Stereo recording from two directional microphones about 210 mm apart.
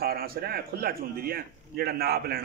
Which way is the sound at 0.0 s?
45° right (ahead or behind).